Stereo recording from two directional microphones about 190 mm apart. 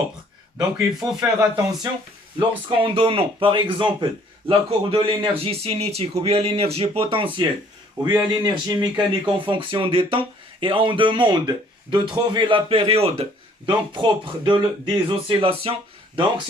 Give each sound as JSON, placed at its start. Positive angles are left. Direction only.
{"t": 0.8, "sound": "a man's voice", "side_deg": -15}